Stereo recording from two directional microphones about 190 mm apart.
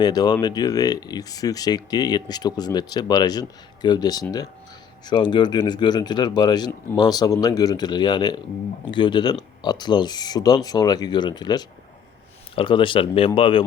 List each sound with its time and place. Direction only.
0.0 s speech: 20° left (ahead or behind)